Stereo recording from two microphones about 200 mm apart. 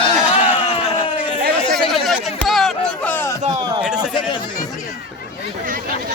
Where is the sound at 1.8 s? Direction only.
Centre (ahead or behind).